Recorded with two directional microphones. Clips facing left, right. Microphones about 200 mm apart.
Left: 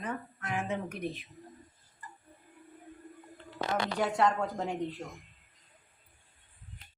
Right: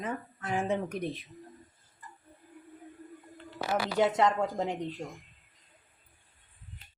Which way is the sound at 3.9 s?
20° right (ahead or behind).